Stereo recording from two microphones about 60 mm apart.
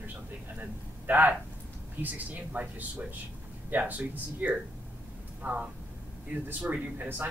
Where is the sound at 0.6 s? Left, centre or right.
Right.